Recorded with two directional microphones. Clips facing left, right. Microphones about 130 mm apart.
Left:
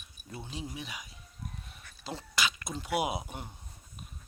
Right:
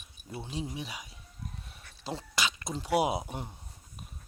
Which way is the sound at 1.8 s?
30° right (ahead or behind).